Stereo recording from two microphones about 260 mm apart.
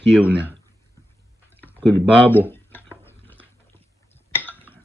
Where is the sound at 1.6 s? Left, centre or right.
Centre.